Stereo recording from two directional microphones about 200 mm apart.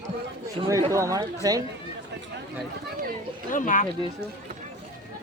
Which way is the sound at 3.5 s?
40° left (ahead or behind).